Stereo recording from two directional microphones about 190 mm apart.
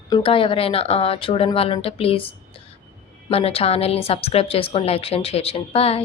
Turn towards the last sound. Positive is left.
turn(degrees=30)  # may be behind; listen again after turning